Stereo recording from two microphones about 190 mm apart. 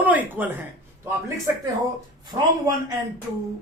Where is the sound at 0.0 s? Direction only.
10° right (ahead or behind).